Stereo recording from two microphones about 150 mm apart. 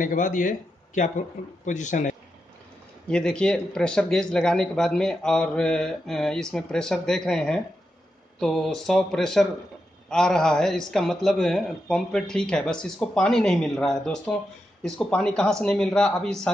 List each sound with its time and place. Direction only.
0.0 s speech: 60° left (ahead or behind)
3.1 s speech: 5° left (ahead or behind)